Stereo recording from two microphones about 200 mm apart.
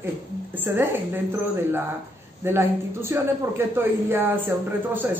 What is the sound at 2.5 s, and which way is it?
Speech, 10° right (ahead or behind).